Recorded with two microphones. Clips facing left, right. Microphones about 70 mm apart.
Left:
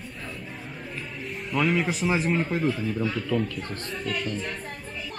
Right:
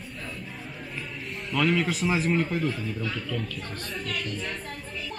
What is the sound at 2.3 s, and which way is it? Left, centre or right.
A child's voice, centre.